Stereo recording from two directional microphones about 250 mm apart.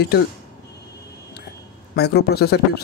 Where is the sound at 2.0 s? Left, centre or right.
Left.